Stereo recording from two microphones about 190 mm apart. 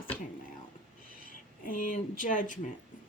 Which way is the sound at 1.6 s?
45° left (ahead or behind).